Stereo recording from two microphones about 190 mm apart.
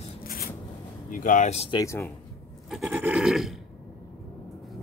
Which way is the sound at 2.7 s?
5° right (ahead or behind).